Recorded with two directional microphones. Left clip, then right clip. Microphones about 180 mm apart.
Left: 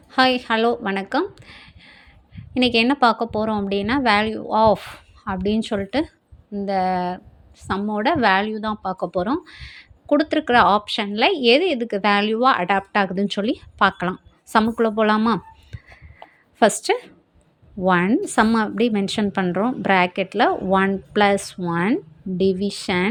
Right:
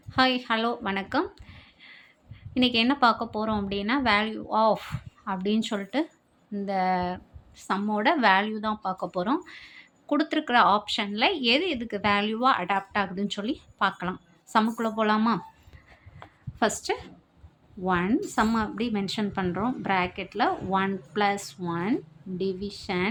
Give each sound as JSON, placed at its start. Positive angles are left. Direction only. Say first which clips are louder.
{"t": 0.1, "sound": "speech", "louder": "left 6 dB", "side_deg": 30}